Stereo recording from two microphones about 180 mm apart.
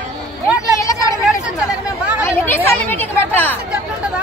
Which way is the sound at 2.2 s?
10° left (ahead or behind).